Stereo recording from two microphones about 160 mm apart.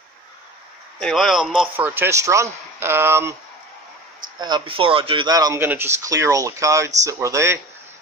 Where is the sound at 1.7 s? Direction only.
10° right (ahead or behind).